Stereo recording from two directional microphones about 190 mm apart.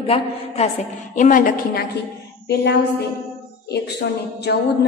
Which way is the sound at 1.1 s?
45° left (ahead or behind).